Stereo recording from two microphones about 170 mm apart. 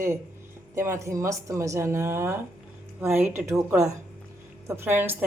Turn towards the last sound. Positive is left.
turn(degrees=-10)  # may be behind; listen again after turning